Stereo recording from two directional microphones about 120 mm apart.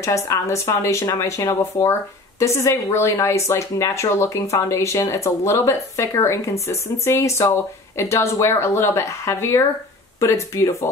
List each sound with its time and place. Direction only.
0.0 s speech: 25° left (ahead or behind)